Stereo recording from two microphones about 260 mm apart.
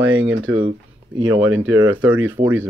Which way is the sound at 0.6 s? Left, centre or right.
Centre.